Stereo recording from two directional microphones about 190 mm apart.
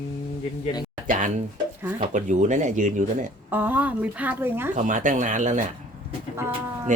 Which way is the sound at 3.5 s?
10° right (ahead or behind).